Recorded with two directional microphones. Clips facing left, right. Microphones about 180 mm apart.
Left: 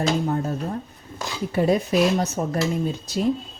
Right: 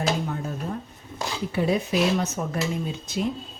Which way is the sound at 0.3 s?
40° left (ahead or behind).